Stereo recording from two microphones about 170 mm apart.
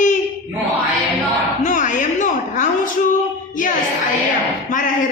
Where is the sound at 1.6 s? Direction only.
45° left (ahead or behind).